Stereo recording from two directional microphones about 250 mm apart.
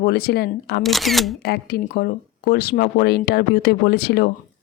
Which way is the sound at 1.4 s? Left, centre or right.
Left.